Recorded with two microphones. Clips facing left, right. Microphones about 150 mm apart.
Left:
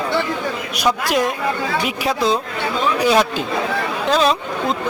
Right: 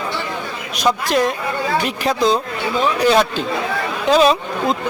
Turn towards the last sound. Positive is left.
turn(degrees=-5)  # may be behind; listen again after turning